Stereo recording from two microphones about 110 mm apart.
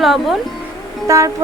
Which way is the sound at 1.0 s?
30° right (ahead or behind).